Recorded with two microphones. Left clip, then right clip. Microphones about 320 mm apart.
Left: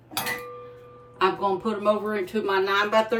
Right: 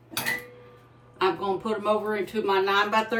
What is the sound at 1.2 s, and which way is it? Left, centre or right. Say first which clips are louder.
Speech: left 2 dB; centre.